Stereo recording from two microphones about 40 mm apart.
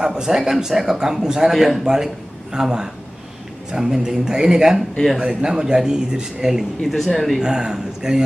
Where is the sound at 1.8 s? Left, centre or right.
Centre.